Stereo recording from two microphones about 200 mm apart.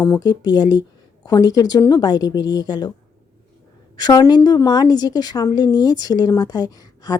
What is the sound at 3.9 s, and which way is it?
A woman's voice, 20° left (ahead or behind).